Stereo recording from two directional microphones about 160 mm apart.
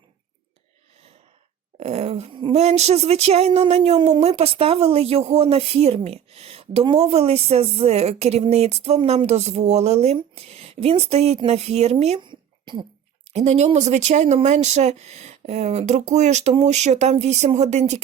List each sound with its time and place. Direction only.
1.8 s speech: 40° right (ahead or behind)
12.3 s a sound: 30° right (ahead or behind)
13.3 s speech: 45° right (ahead or behind)